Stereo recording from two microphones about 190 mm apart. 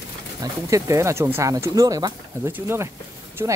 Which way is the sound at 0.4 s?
15° right (ahead or behind).